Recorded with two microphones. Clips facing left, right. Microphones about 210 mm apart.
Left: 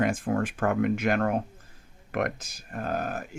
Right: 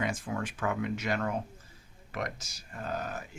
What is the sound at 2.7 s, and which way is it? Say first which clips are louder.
Speech: left 6 dB; 55° left (ahead or behind).